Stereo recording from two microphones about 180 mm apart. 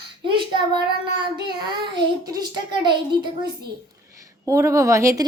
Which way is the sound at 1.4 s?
25° right (ahead or behind).